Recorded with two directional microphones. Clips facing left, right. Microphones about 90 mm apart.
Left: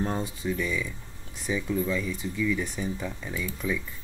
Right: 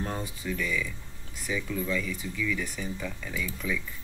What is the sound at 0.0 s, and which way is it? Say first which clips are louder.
Speech: left 4 dB; 25° left (ahead or behind).